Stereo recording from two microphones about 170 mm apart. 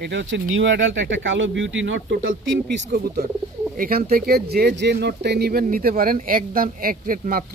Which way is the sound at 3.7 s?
60° right (ahead or behind).